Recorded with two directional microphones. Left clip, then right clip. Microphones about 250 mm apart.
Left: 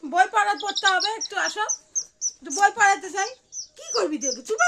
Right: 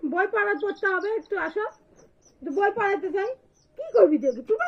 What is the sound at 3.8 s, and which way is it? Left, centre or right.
Bird, left.